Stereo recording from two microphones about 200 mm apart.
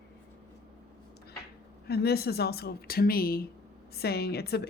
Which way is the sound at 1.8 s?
55° left (ahead or behind).